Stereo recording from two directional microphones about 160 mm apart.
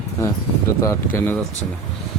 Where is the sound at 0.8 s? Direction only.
15° left (ahead or behind).